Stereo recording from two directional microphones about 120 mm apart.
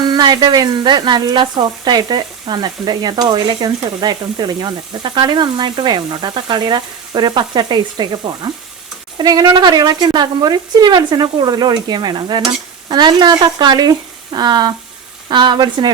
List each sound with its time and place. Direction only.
0.0 s speech: 35° right (ahead or behind)